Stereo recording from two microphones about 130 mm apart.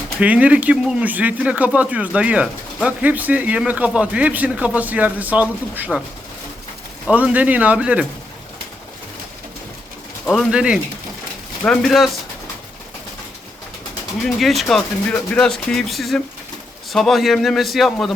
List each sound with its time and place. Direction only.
0.2 s speech: 10° right (ahead or behind)
7.1 s speech: 10° right (ahead or behind)
10.2 s speech: centre (ahead or behind)
11.6 s speech: 5° left (ahead or behind)
14.2 s speech: centre (ahead or behind)